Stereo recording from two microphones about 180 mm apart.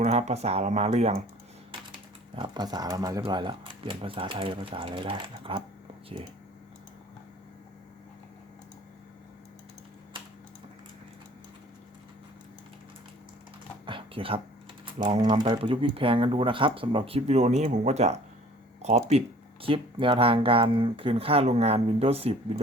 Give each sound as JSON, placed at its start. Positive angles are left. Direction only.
{"t": 0.0, "sound": "speech", "side_deg": -40}
{"t": 1.9, "sound": "speech", "side_deg": -25}
{"t": 13.8, "sound": "a sound", "side_deg": -30}
{"t": 15.0, "sound": "speech", "side_deg": -25}